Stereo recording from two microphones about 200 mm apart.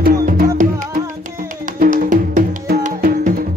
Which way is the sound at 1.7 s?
45° right (ahead or behind).